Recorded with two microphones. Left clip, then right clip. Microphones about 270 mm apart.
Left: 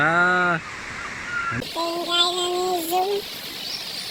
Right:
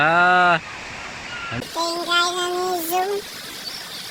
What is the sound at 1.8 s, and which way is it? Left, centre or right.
Music, right.